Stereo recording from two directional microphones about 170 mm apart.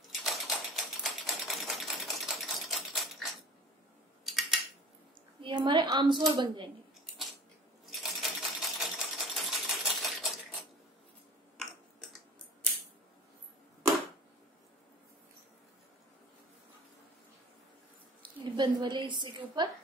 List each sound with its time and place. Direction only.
0.2 s typewriter: centre (ahead or behind)
4.3 s scissors: centre (ahead or behind)
5.4 s a sound: 25° right (ahead or behind)
6.3 s a woman's voice: 30° right (ahead or behind)
7.9 s sewing machine: centre (ahead or behind)
11.5 s a sound: 5° left (ahead or behind)
18.4 s a woman's voice: 25° right (ahead or behind)